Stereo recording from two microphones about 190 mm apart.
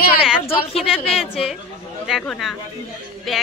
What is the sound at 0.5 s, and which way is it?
Speech, 30° left (ahead or behind).